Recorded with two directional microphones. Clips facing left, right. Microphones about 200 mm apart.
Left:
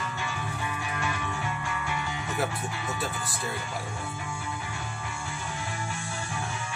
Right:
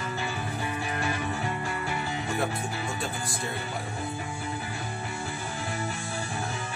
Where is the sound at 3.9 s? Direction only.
35° right (ahead or behind).